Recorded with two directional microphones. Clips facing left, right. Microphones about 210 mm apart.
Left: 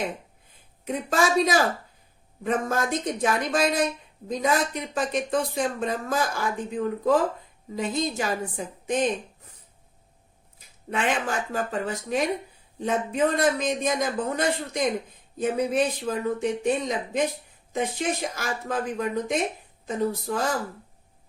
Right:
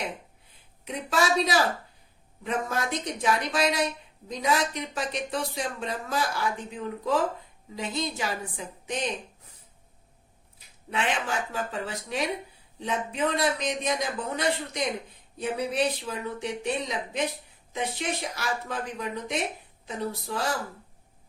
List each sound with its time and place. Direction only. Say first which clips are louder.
0.9 s speech: left 2 dB; 50° left (ahead or behind)
10.9 s speech: left 3 dB; 45° left (ahead or behind)